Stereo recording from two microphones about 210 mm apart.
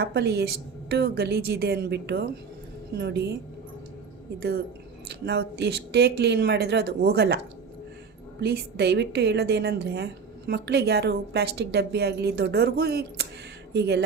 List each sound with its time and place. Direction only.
0.0 s a woman's voice: 50° right (ahead or behind)
4.4 s a woman's voice: 50° right (ahead or behind)
8.4 s a woman's voice: 50° right (ahead or behind)